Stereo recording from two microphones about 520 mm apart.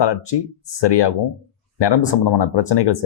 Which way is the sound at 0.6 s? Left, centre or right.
Left.